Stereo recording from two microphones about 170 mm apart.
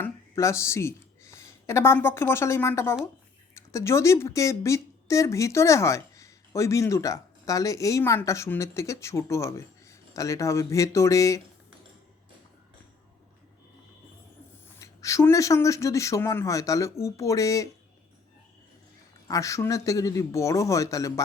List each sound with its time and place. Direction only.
0.0 s speech: 15° left (ahead or behind)
14.8 s speech: 20° left (ahead or behind)
19.3 s speech: 20° left (ahead or behind)